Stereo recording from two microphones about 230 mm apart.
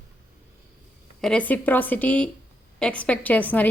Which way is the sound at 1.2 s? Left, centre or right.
Centre.